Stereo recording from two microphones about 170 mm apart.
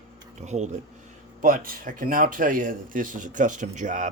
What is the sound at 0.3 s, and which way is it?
Speech, 45° right (ahead or behind).